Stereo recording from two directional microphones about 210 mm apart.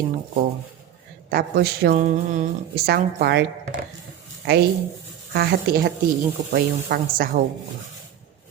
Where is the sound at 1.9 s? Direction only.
35° right (ahead or behind); by 3.4 s 50° right (ahead or behind).